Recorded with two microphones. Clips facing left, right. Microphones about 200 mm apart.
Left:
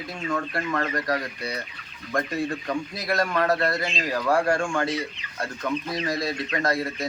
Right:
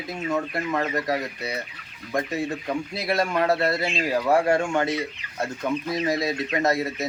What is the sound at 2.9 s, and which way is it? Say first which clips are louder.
Speech: right 2 dB; 25° right (ahead or behind).